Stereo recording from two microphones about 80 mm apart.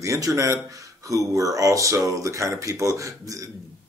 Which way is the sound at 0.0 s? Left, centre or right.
Right.